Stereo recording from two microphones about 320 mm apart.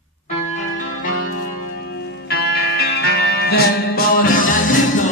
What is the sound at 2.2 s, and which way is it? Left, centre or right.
Music, left.